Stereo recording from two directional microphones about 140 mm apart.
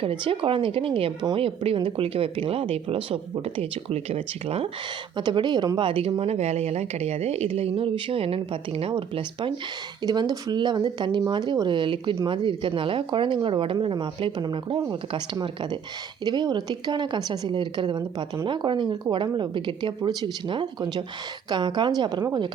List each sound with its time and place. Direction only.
0.0 s speech: 40° right (ahead or behind)
5.1 s speech: 35° right (ahead or behind)